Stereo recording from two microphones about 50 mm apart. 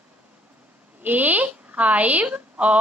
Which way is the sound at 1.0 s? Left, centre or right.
Right.